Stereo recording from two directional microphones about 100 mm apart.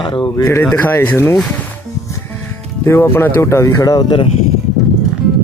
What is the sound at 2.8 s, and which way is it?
Speech, 20° left (ahead or behind).